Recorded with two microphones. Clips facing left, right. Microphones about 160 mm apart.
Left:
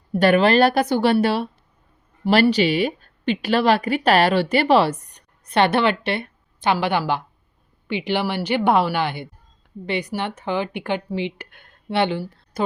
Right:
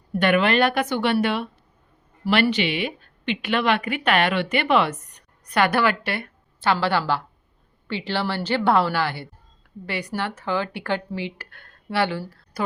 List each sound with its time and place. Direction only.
0.1 s a woman's voice: 35° left (ahead or behind)